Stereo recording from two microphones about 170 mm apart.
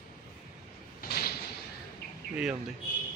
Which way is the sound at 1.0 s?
65° left (ahead or behind).